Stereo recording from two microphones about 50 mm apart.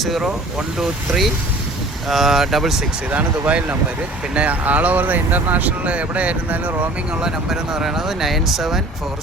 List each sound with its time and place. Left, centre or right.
0.0 s speech: centre
3.1 s speech: right
7.2 s speech: centre